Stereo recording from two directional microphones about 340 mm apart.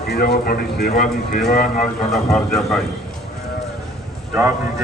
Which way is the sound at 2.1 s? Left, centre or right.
Centre.